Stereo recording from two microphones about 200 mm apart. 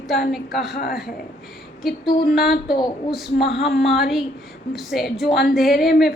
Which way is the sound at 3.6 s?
Centre (ahead or behind).